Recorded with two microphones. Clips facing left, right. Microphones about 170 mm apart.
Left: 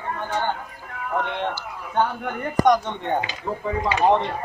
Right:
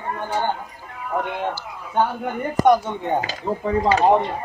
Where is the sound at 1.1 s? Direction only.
10° right (ahead or behind).